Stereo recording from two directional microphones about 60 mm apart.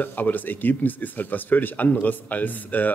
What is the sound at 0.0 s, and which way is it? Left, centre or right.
Speech, left.